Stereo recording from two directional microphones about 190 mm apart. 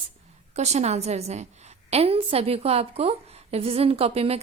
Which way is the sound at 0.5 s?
35° right (ahead or behind).